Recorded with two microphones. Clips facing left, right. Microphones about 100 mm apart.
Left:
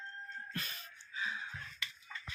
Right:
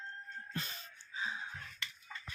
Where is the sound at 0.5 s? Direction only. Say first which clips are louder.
Right 1 dB; 25° right (ahead or behind).